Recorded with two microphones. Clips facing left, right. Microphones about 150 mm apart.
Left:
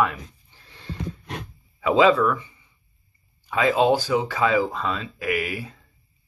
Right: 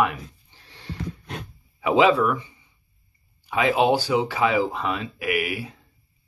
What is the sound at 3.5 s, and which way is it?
Speech, 20° right (ahead or behind).